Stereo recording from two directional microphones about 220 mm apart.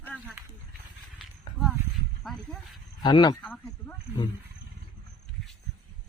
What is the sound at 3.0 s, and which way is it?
Speech, 20° left (ahead or behind).